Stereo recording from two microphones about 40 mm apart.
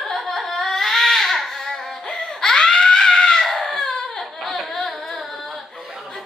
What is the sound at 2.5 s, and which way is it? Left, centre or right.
Screaming, left.